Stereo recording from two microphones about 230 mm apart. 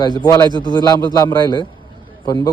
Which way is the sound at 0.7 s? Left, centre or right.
Centre.